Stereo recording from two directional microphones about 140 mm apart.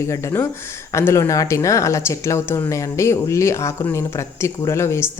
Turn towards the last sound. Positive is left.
turn(degrees=20)  # may be behind; listen again after turning